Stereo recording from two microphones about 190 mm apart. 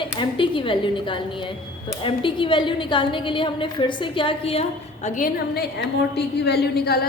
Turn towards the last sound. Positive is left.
turn(degrees=55)  # may be behind; listen again after turning